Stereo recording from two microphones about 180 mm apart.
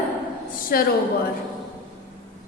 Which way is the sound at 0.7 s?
60° left (ahead or behind).